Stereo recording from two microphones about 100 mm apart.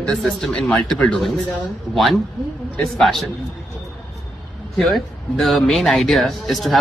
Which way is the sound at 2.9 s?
Centre (ahead or behind).